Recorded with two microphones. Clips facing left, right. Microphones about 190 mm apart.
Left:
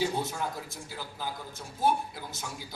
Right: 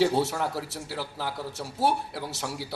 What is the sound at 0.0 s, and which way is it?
A man's voice, 75° right (ahead or behind).